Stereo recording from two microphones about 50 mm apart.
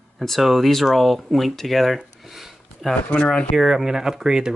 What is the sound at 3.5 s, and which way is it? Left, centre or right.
Speech, centre.